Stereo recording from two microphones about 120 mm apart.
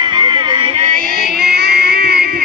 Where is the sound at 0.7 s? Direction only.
70° right (ahead or behind).